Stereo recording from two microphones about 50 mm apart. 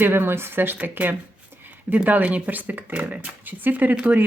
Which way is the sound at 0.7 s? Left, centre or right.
Right.